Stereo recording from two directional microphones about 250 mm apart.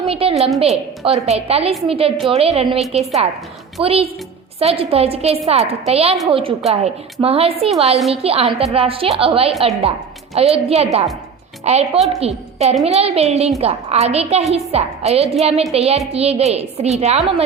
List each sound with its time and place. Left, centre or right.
0.0 s a woman's voice: right